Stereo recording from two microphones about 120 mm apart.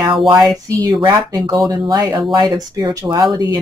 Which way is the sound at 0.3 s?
30° right (ahead or behind).